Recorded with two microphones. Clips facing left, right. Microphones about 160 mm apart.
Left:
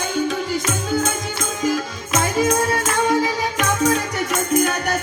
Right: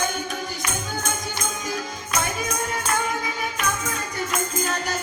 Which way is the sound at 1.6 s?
90° left.